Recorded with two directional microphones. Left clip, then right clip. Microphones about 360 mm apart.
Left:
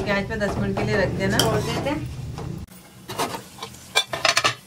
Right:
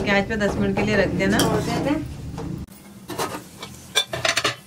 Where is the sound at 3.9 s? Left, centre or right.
Centre.